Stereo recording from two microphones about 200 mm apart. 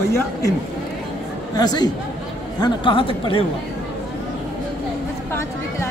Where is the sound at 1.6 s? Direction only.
20° left (ahead or behind).